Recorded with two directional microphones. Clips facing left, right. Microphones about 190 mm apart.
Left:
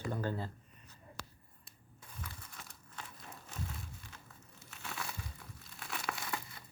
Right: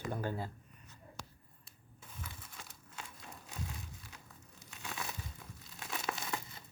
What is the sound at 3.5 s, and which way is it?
Crumpling, 15° right (ahead or behind).